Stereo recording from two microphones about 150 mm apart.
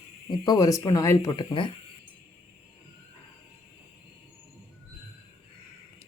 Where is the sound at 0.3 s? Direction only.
25° left (ahead or behind).